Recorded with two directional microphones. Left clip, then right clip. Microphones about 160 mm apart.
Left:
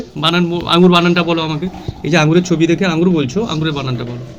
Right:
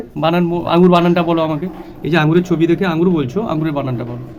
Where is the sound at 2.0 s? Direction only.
10° right (ahead or behind).